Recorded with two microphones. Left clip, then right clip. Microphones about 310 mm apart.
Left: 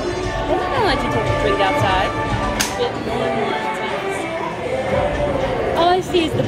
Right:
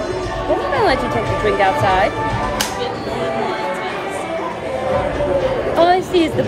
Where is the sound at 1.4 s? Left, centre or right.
Right.